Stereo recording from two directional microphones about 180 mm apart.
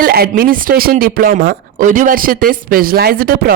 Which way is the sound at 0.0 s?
55° right (ahead or behind).